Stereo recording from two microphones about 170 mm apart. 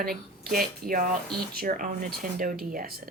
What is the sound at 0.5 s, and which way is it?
Speech, 60° right (ahead or behind).